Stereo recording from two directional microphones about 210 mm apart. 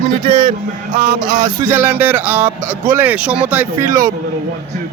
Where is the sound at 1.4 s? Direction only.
10° right (ahead or behind).